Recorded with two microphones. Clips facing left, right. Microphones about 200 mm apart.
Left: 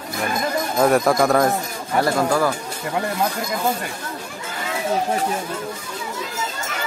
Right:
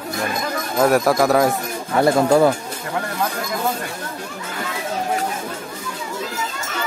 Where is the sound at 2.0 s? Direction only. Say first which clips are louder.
Right 5 dB; 25° right (ahead or behind).